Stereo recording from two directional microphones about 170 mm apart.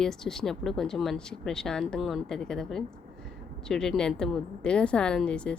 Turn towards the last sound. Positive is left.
turn(degrees=5)  # may be behind; listen again after turning